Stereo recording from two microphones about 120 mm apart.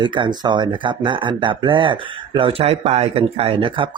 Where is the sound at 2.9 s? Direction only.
55° right (ahead or behind).